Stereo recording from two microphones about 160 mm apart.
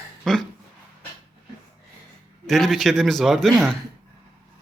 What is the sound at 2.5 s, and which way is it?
A man's voice, centre (ahead or behind).